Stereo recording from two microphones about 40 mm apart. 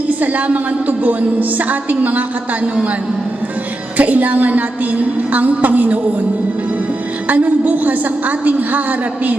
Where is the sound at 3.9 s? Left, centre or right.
Right.